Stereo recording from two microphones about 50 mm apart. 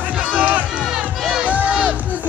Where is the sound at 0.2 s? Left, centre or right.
Right.